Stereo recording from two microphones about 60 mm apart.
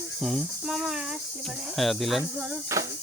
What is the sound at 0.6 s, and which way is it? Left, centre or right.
Speech, centre.